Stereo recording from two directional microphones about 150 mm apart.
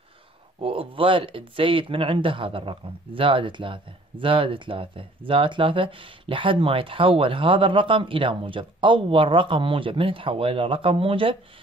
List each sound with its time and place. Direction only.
0.6 s speech: 35° right (ahead or behind)